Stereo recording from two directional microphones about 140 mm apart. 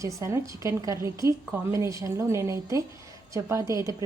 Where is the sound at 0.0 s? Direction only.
20° right (ahead or behind).